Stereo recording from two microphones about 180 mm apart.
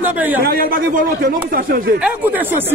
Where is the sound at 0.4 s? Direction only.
55° right (ahead or behind).